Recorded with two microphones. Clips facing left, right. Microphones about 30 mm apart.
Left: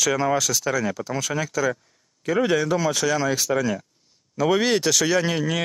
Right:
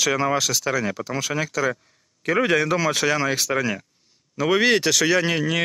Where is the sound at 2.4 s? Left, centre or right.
Right.